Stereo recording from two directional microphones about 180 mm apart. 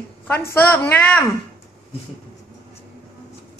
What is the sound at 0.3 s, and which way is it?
Speech, 10° left (ahead or behind).